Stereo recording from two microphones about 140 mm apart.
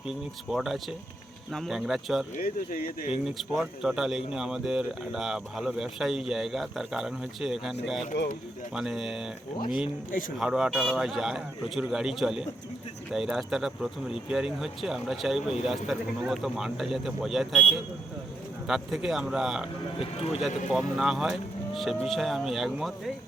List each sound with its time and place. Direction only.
0.1 s speech: centre (ahead or behind)
2.3 s speech: 85° left
3.2 s speech: 5° right (ahead or behind)
10.1 s speech: 75° left (ahead or behind)
10.3 s speech: 5° right (ahead or behind)
20.0 s speech: 40° left (ahead or behind)
20.7 s speech: 5° right (ahead or behind)